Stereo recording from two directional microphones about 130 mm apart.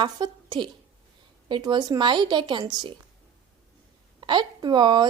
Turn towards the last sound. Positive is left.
turn(degrees=-35)  # may be behind; listen again after turning